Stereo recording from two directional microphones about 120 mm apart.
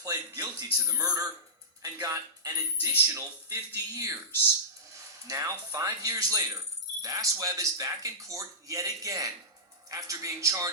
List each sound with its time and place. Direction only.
0.0 s a sound: 30° right (ahead or behind)
0.8 s speech: 30° right (ahead or behind)
5.3 s speech: 25° right (ahead or behind)